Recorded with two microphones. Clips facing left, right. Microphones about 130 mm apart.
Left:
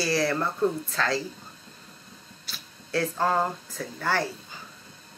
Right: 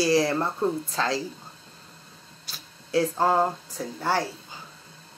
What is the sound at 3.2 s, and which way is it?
Speech, 25° right (ahead or behind).